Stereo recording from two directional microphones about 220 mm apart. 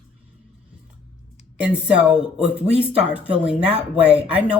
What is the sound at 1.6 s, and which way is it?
Speech, 5° right (ahead or behind).